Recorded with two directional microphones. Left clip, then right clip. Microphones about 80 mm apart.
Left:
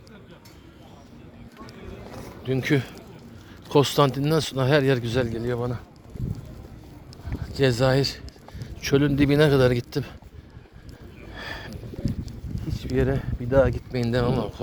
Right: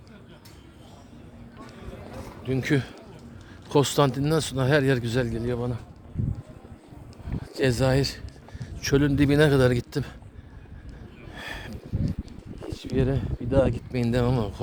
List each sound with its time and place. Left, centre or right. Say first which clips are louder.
2.2 s a sound: left 2 dB; centre
2.6 s a man's voice: left 2 dB; centre
7.3 s speech: left 2 dB; right
11.3 s sniff: left 1 dB; right
12.6 s speech: left 2 dB; centre
14.3 s speech: left 2 dB; right